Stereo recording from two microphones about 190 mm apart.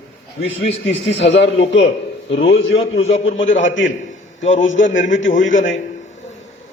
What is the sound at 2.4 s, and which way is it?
A man's voice, 75° left (ahead or behind).